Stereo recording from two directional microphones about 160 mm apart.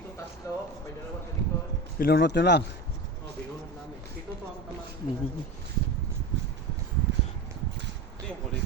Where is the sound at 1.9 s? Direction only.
75° left (ahead or behind); by 2.6 s 90° left.